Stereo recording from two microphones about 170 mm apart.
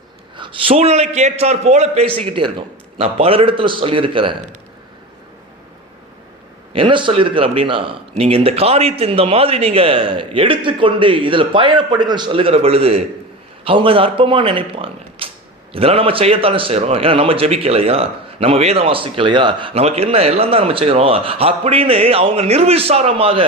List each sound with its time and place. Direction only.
0.3 s a man's voice: 30° right (ahead or behind)
6.7 s a man's voice: 30° right (ahead or behind)